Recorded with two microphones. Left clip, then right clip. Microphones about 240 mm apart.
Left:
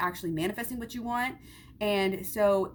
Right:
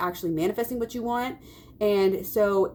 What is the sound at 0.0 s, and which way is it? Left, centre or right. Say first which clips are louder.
A woman's voice: right 4 dB; left.